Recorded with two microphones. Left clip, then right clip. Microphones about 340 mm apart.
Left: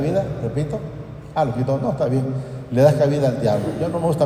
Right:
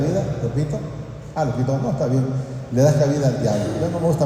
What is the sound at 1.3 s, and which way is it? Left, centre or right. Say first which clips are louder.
A man's voice: left 2 dB; left.